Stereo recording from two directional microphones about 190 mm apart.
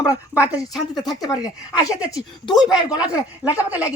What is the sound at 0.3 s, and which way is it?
Speech, 5° right (ahead or behind).